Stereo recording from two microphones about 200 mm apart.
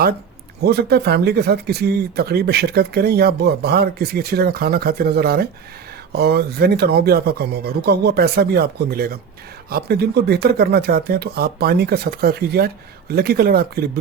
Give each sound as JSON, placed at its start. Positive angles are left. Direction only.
{"t": 0.6, "sound": "speech", "side_deg": -55}